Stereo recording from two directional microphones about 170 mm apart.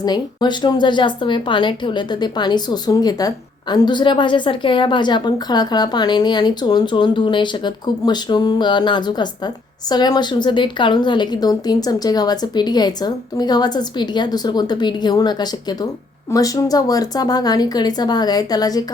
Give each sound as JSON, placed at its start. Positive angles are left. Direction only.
{"t": 0.0, "sound": "speech", "side_deg": 25}